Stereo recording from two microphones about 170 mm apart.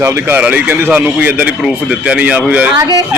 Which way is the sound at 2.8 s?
20° right (ahead or behind).